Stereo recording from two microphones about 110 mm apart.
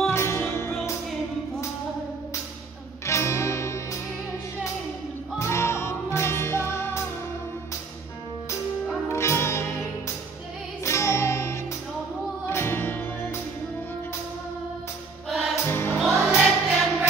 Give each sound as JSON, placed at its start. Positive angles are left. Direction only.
{"t": 0.1, "sound": "music", "side_deg": 25}
{"t": 3.1, "sound": "music", "side_deg": 25}
{"t": 5.4, "sound": "music", "side_deg": 25}
{"t": 9.1, "sound": "music", "side_deg": 25}
{"t": 15.2, "sound": "music", "side_deg": 0}
{"t": 15.5, "sound": "music", "side_deg": 20}
{"t": 16.3, "sound": "music", "side_deg": -5}